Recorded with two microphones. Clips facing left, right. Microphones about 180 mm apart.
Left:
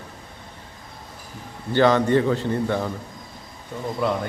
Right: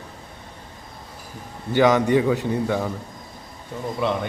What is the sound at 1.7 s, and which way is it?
A man's voice, 15° right (ahead or behind).